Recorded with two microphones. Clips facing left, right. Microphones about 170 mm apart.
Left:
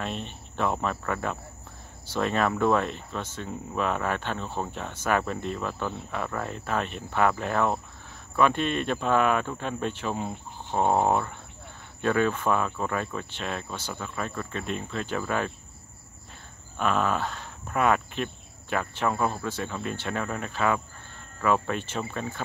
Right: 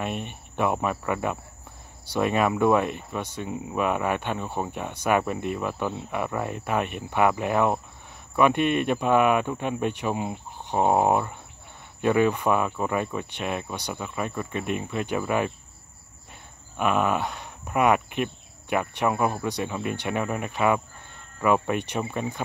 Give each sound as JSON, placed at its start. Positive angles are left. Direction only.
{"t": 0.0, "sound": "speech", "side_deg": -15}
{"t": 16.7, "sound": "speech", "side_deg": -15}